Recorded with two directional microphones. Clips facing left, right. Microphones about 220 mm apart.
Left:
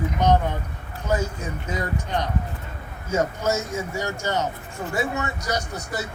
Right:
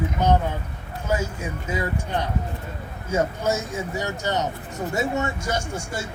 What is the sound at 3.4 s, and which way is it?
A man's voice, 15° right (ahead or behind).